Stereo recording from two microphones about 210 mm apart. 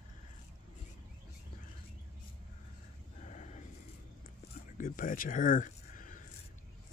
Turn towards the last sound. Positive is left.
turn(degrees=40)  # may be behind; listen again after turning